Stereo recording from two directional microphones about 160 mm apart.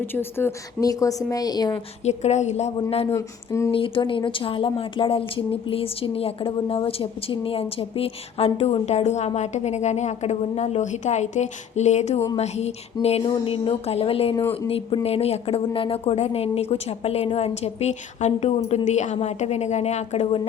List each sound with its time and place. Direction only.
0.0 s a woman's voice: 15° left (ahead or behind)
2.0 s a woman's voice: 45° left (ahead or behind)
3.2 s a woman's voice: 20° left (ahead or behind)
3.7 s a woman's voice: 35° left (ahead or behind)